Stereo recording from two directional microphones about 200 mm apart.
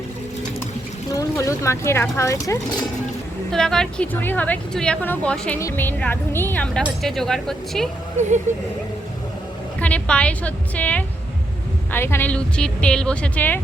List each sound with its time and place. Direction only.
1.1 s speech: 15° left (ahead or behind)
3.5 s speech: 5° left (ahead or behind)
8.2 s speech: 35° right (ahead or behind)
9.8 s a woman's voice: 5° left (ahead or behind)